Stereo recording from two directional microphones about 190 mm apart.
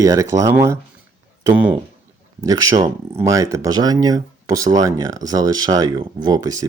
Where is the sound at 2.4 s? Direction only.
20° right (ahead or behind).